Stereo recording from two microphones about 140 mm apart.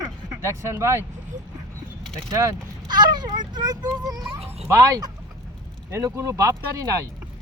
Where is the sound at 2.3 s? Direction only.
20° right (ahead or behind).